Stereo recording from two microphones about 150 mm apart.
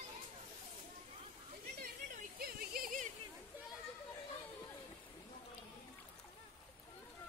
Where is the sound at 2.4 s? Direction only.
85° right.